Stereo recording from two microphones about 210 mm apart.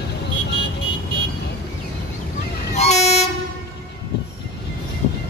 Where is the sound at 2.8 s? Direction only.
30° left (ahead or behind).